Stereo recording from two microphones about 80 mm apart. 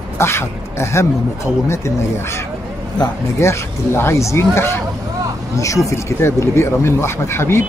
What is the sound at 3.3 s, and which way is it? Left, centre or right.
Speech, left.